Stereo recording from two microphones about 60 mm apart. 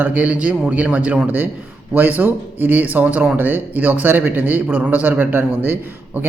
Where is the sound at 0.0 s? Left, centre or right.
Right.